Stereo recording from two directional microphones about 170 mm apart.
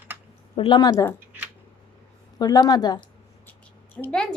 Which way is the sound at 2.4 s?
25° left (ahead or behind).